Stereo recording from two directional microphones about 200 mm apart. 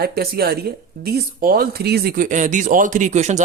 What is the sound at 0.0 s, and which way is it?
Speech, 50° right (ahead or behind).